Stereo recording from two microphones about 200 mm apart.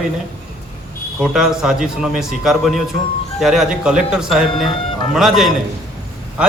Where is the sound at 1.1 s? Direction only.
Centre (ahead or behind).